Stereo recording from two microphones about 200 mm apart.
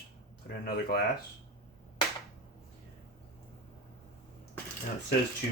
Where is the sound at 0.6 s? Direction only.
50° left (ahead or behind).